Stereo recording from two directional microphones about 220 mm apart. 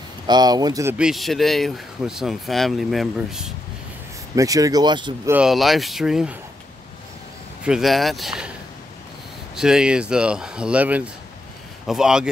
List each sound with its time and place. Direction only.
0.3 s speech: 20° right (ahead or behind)
0.9 s speech: centre (ahead or behind)
4.4 s speech: 15° right (ahead or behind)
5.3 s speech: centre (ahead or behind)
7.6 s speech: centre (ahead or behind)
9.6 s speech: 5° right (ahead or behind)